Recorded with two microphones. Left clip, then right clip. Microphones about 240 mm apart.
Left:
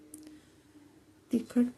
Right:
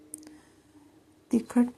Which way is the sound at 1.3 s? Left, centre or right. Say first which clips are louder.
Right 4 dB; centre.